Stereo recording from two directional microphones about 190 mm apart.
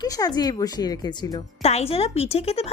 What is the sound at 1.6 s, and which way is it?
A woman's voice, 30° left (ahead or behind).